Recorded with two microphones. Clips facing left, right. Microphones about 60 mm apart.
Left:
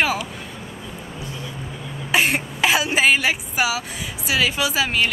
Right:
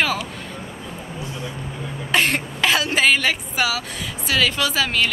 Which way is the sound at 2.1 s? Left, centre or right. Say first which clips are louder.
Even; centre.